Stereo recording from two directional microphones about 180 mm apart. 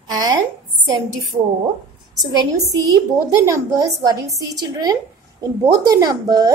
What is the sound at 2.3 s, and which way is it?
Speech, 20° right (ahead or behind).